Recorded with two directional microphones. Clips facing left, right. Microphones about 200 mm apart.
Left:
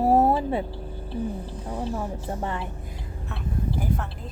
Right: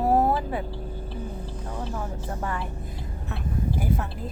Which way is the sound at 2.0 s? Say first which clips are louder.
Left 2 dB; 25° left (ahead or behind).